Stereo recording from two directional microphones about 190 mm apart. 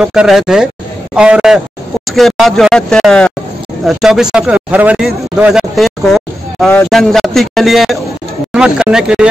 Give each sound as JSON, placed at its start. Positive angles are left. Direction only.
{"t": 0.0, "sound": "a man's voice", "side_deg": -5}